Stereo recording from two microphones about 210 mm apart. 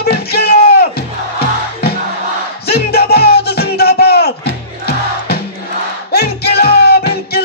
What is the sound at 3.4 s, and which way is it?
Music, 50° left (ahead or behind).